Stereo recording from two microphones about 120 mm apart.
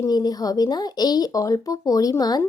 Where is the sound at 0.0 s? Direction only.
35° left (ahead or behind).